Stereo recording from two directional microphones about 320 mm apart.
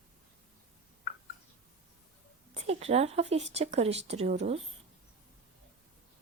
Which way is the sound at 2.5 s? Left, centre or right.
Centre.